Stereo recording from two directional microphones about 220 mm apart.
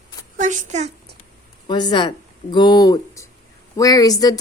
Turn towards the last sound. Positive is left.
turn(degrees=15)  # may be behind; listen again after turning